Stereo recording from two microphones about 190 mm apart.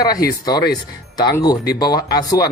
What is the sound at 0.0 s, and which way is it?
Speech, 20° left (ahead or behind).